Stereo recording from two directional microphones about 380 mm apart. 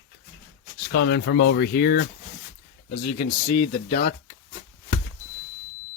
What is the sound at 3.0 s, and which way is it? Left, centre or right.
Speech, centre.